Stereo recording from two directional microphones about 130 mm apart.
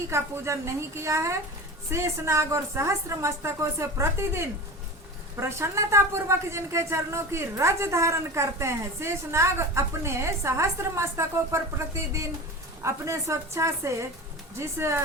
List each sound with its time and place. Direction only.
0.1 s a woman's voice: 20° right (ahead or behind)